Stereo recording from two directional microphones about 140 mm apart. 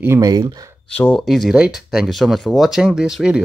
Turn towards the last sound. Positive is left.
turn(degrees=-5)  # may be behind; listen again after turning